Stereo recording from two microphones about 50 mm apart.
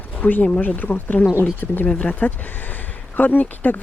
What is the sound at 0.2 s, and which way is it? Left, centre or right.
Speech, left.